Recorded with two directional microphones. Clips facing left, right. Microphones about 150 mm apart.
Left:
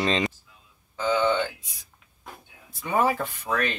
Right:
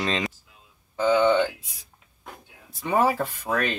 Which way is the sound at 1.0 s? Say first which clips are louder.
Right 4 dB; 35° right (ahead or behind).